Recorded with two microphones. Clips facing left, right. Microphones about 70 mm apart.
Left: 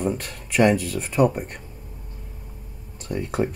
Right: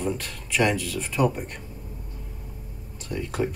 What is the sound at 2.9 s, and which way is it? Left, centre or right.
Speech, left.